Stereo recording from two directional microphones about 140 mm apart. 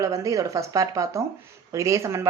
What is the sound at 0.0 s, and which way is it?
Speech, 25° right (ahead or behind).